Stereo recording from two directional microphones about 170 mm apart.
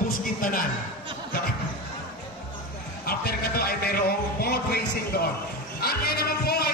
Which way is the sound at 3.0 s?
65° left (ahead or behind).